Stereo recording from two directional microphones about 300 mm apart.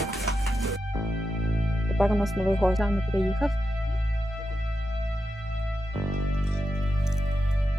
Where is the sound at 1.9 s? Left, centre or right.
Centre.